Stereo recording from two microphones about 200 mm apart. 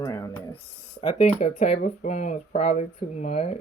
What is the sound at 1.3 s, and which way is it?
Speech, 35° left (ahead or behind).